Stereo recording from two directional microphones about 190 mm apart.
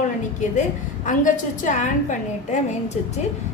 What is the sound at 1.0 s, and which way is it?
A woman's voice, 40° left (ahead or behind).